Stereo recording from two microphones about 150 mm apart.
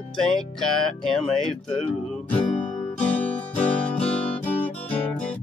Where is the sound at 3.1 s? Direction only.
10° left (ahead or behind).